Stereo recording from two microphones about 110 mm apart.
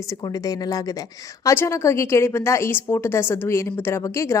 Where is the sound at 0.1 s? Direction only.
30° left (ahead or behind).